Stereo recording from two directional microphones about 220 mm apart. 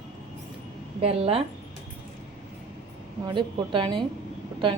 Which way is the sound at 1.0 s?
25° right (ahead or behind).